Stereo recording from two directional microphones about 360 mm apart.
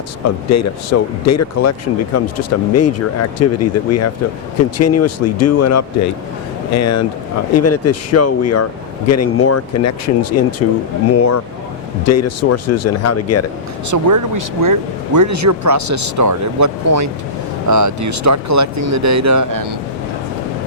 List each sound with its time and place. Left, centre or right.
0.3 s speech: left
13.9 s speech: right